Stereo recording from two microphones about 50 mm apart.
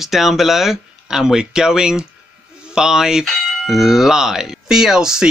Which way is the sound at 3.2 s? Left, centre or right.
Centre.